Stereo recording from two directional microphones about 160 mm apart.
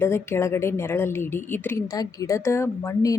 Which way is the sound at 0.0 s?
15° left (ahead or behind).